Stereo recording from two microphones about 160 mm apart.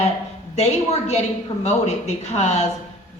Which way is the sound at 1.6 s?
45° left (ahead or behind).